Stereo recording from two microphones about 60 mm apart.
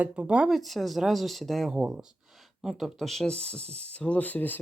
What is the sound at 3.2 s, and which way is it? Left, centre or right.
Speech, centre.